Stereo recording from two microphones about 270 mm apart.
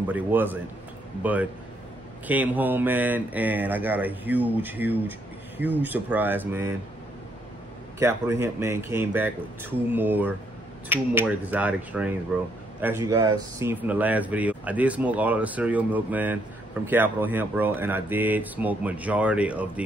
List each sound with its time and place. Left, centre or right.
0.1 s speech: centre
8.0 s speech: centre
12.8 s speech: centre